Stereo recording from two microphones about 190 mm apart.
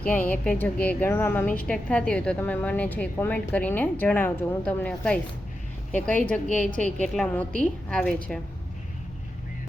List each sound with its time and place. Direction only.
0.0 s a woman's voice: 10° left (ahead or behind)
6.7 s a woman's voice: 40° right (ahead or behind)
7.1 s a woman's voice: 5° left (ahead or behind)